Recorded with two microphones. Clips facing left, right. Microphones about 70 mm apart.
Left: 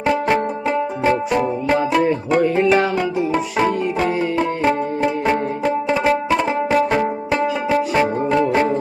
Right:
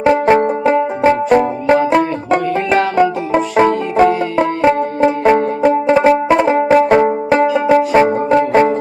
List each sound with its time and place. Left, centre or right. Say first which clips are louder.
0.0 s music: right 7 dB; right
3.0 s music: right 6 dB; right
4.6 s banjo: right 8 dB; right
7.8 s music: right 6 dB; right